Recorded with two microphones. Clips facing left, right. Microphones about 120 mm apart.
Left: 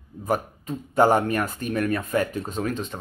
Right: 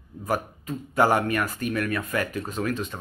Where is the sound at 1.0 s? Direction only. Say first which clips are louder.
Left 2 dB; 35° left (ahead or behind).